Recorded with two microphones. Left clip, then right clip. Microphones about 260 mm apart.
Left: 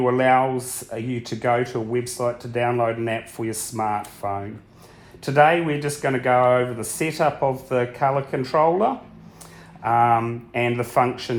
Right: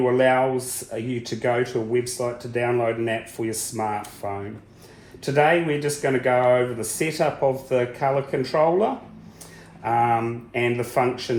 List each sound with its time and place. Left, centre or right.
0.0 s speech: left